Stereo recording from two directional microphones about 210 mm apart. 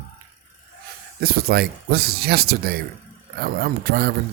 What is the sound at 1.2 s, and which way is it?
Speech, 45° right (ahead or behind).